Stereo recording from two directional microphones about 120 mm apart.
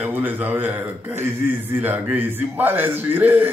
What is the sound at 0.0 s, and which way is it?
A man's voice, 15° right (ahead or behind).